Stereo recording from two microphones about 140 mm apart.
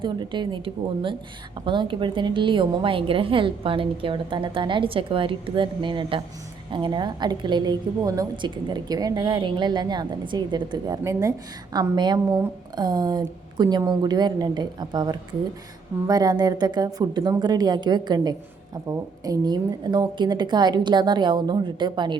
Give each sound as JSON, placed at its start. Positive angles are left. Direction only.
{"t": 0.0, "sound": "a woman's voice", "side_deg": -35}